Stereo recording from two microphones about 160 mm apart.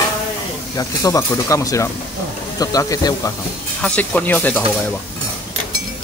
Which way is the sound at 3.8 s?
10° left (ahead or behind).